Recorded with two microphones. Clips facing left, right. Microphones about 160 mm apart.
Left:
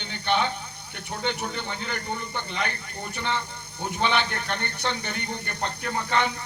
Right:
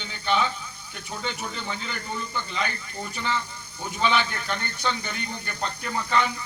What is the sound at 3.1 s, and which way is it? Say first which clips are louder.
A man's voice: even; 60° left (ahead or behind).